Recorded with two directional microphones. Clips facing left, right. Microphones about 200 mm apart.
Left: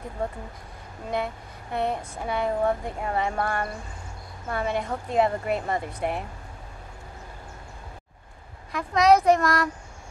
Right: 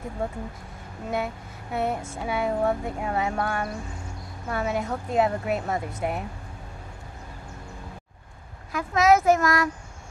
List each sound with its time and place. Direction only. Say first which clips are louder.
1.1 s a woman's voice: even; 5° right (ahead or behind)
8.7 s a woman's voice: left 1 dB; centre (ahead or behind)